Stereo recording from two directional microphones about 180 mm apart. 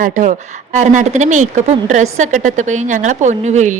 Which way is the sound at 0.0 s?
45° right (ahead or behind).